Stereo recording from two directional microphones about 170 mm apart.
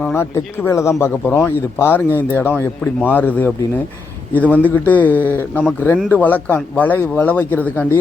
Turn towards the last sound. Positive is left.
turn(degrees=10)  # may be behind; listen again after turning